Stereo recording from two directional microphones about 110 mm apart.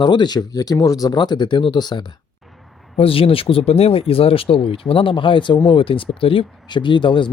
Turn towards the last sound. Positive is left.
turn(degrees=50)  # may be behind; listen again after turning